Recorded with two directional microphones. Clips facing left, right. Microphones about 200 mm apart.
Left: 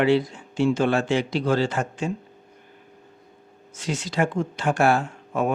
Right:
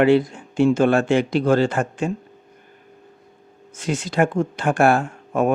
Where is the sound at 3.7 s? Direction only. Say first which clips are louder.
Right 4 dB; 55° right (ahead or behind).